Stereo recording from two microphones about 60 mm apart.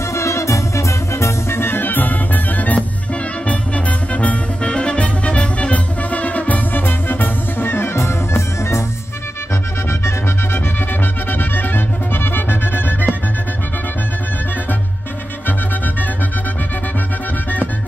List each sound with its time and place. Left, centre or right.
0.1 s music: left
11.2 s music: left